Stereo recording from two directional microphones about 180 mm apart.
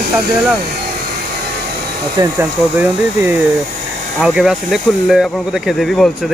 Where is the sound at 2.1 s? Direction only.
15° right (ahead or behind).